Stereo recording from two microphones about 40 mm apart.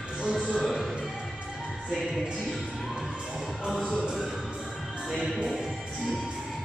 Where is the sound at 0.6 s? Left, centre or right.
Centre.